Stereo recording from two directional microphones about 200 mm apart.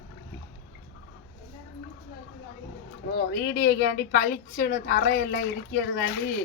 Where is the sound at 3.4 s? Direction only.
55° left (ahead or behind).